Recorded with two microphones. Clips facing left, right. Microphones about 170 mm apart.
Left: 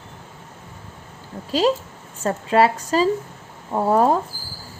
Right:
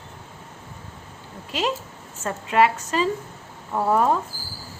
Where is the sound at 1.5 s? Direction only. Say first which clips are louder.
Left 7 dB; 35° left (ahead or behind).